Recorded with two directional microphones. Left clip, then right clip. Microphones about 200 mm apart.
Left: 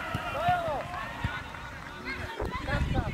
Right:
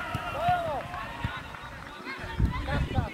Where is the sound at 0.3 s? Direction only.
45° left (ahead or behind).